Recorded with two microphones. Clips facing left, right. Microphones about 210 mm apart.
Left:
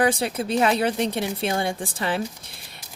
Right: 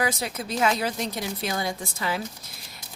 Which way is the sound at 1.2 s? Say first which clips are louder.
Left 4 dB; 30° left (ahead or behind).